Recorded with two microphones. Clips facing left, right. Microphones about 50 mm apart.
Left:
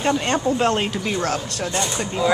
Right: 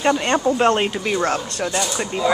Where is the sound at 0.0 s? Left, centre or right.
Centre.